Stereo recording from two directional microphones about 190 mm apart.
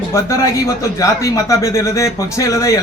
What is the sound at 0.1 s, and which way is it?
A man's voice, 15° left (ahead or behind).